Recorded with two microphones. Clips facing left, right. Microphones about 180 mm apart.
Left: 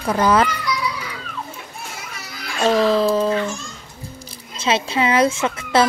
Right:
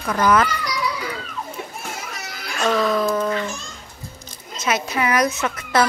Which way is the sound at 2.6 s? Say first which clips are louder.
Left 3 dB; 30° left (ahead or behind).